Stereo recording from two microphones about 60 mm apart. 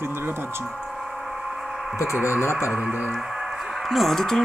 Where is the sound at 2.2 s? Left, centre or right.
Left.